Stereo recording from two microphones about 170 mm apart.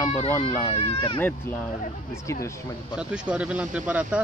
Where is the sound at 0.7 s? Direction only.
35° left (ahead or behind).